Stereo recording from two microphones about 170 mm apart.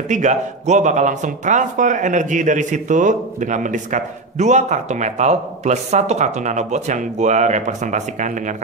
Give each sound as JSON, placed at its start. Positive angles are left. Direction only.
{"t": 0.1, "sound": "speech", "side_deg": -45}